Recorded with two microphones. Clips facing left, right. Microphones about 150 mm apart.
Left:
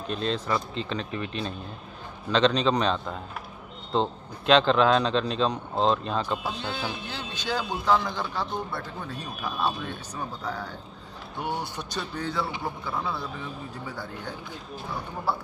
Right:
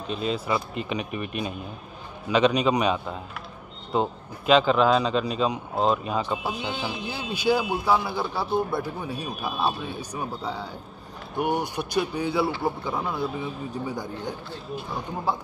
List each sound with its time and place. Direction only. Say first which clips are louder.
0.0 s a man's voice: right 1 dB; 5° right (ahead or behind)
15.3 s a man's voice: right 1 dB; 15° right (ahead or behind)